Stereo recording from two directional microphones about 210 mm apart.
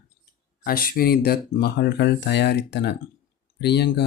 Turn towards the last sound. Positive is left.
turn(degrees=50)  # may be behind; listen again after turning